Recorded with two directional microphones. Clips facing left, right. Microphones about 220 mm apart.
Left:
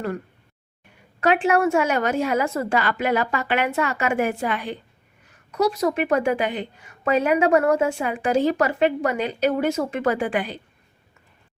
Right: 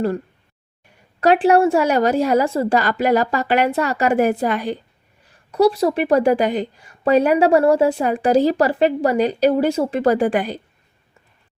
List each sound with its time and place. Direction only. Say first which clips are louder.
1.2 s a woman's voice: right 5 dB; 35° right (ahead or behind)